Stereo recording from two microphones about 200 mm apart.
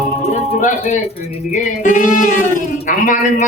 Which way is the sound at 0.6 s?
40° left (ahead or behind).